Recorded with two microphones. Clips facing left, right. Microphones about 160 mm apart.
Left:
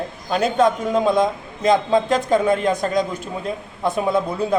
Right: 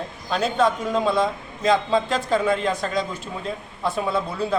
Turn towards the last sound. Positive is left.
turn(degrees=15)  # may be behind; listen again after turning